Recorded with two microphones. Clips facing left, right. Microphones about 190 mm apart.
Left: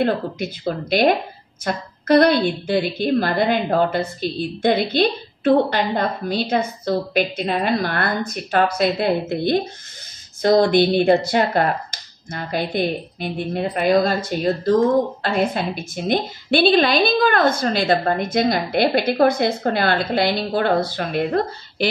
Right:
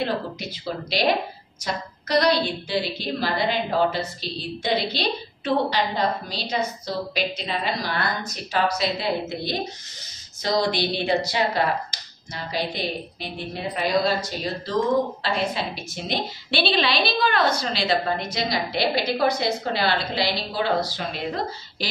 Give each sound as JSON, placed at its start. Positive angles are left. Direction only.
{"t": 0.0, "sound": "a woman's voice", "side_deg": 55}